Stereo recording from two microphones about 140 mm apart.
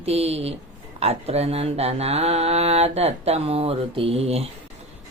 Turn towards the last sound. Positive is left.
turn(degrees=-45)  # may be behind; listen again after turning